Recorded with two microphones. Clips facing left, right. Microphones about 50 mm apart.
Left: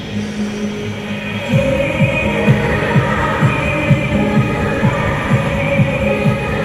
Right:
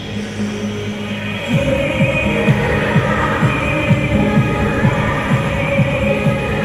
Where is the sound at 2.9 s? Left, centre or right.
Left.